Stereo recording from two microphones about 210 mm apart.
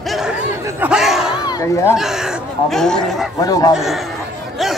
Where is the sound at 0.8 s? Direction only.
5° right (ahead or behind).